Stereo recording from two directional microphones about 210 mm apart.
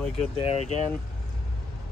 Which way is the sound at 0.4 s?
30° left (ahead or behind).